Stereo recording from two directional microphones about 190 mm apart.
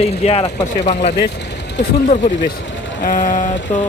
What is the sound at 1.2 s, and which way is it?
Vehicle, 65° left (ahead or behind).